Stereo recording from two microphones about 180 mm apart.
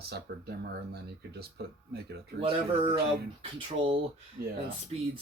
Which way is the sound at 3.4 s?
30° right (ahead or behind).